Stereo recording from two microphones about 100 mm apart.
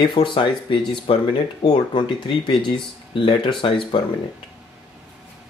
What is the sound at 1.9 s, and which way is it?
Speech, 55° left (ahead or behind).